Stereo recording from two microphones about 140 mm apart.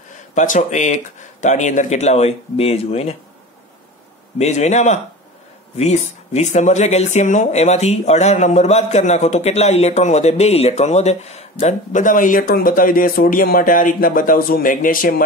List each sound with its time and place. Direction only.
0.3 s speech: 60° left (ahead or behind)
4.4 s speech: 55° left (ahead or behind); by 15.2 s 85° left